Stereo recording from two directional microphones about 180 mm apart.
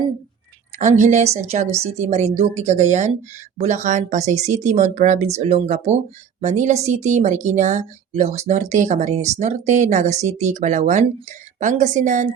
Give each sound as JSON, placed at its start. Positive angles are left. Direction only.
{"t": 0.8, "sound": "speech", "side_deg": -40}